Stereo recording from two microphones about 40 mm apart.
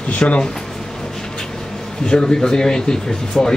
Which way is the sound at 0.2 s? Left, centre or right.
Left.